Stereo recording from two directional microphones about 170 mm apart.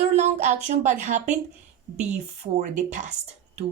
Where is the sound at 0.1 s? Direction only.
40° right (ahead or behind).